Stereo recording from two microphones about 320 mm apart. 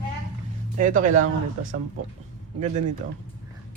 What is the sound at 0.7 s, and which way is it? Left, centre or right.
Speech, right.